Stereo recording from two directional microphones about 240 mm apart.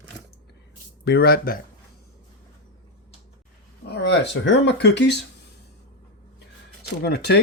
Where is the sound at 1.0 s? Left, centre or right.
Left.